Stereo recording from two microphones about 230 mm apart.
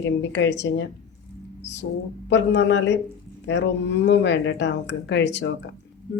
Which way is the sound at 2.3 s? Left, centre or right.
Left.